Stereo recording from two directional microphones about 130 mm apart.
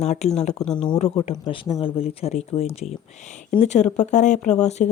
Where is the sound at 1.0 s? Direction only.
50° left (ahead or behind).